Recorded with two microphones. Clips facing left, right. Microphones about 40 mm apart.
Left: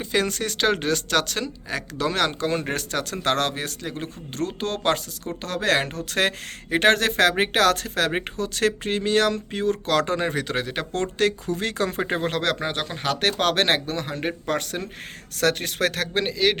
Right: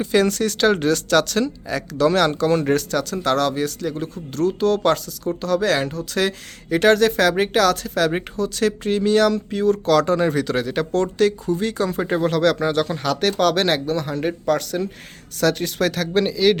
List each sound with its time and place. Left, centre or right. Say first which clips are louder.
0.0 s speech: right 6 dB; centre
2.7 s speech: right 6 dB; left
10.9 s speech: right 4 dB; left
12.5 s speech: right 7 dB; left